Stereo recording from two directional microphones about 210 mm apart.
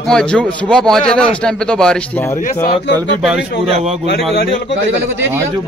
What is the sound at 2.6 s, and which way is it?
Speech, 55° left (ahead or behind).